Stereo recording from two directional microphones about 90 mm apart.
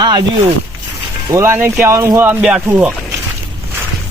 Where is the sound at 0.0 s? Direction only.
50° right (ahead or behind).